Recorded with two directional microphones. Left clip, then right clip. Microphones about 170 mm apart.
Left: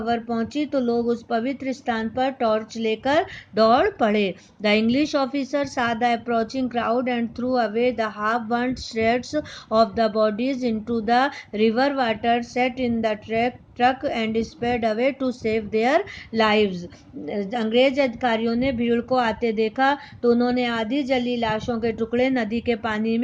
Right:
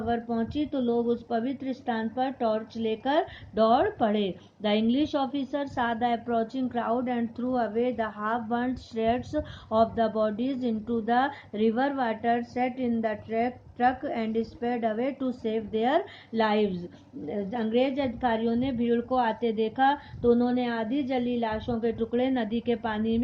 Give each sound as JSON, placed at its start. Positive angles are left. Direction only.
{"t": 0.0, "sound": "speech", "side_deg": 40}
{"t": 0.9, "sound": "speech", "side_deg": 60}
{"t": 1.3, "sound": "a woman's voice", "side_deg": 40}
{"t": 20.2, "sound": "a woman's voice", "side_deg": 55}